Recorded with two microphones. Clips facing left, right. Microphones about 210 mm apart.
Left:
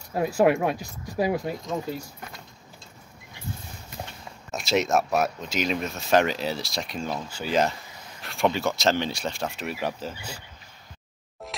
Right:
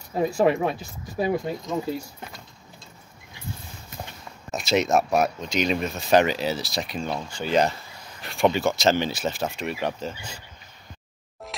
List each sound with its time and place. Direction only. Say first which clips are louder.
0.1 s speech: even; 5° left (ahead or behind)
4.5 s speech: right 2 dB; centre (ahead or behind)